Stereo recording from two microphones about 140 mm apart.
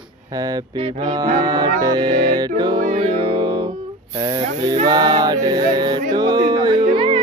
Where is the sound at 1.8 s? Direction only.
30° right (ahead or behind).